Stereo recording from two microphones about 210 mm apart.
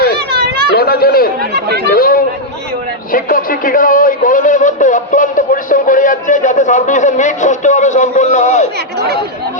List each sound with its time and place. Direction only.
0.3 s children playing: 50° right (ahead or behind)
0.8 s a sound: 45° left (ahead or behind)
1.9 s a man's voice: 45° left (ahead or behind)